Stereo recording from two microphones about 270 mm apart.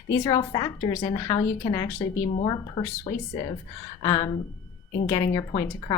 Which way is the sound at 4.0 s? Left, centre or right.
Centre.